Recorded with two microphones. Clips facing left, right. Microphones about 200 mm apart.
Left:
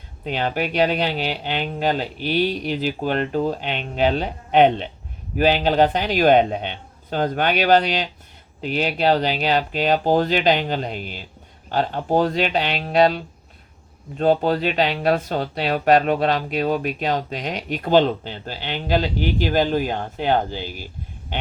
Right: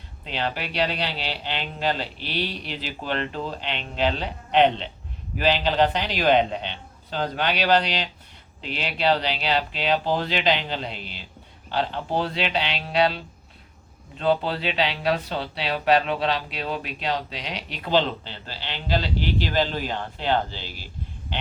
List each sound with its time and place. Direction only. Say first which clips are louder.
0.3 s speech: left 6 dB; 50° left (ahead or behind)